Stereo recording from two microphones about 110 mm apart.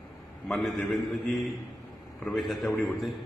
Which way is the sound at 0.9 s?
Centre (ahead or behind).